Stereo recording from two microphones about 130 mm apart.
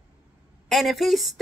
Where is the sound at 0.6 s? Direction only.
Centre (ahead or behind).